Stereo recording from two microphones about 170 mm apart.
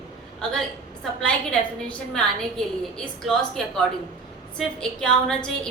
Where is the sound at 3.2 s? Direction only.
Centre (ahead or behind).